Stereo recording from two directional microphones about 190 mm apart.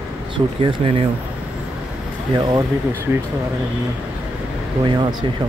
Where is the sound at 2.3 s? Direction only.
20° right (ahead or behind).